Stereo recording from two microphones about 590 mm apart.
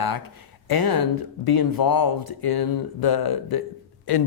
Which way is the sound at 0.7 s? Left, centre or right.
Left.